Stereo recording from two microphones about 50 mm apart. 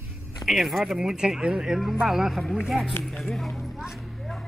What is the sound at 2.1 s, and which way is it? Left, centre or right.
Speech, centre.